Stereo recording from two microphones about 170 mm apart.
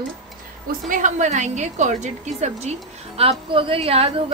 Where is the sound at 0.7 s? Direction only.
50° right (ahead or behind).